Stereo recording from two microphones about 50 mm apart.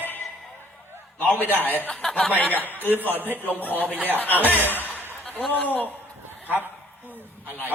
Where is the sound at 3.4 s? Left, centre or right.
Left.